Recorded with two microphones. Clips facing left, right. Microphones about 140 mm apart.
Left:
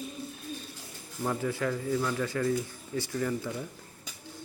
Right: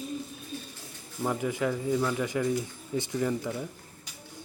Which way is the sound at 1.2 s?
15° right (ahead or behind).